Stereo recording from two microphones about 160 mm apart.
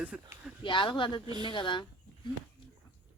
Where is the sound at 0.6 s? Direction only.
30° left (ahead or behind).